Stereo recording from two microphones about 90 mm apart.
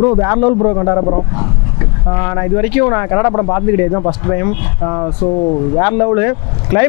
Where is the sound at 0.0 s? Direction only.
30° left (ahead or behind).